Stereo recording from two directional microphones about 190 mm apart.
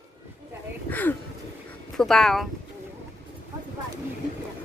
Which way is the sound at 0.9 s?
10° left (ahead or behind).